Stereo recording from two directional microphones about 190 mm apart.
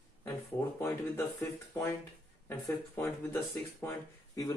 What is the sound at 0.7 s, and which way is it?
A man's voice, 15° left (ahead or behind).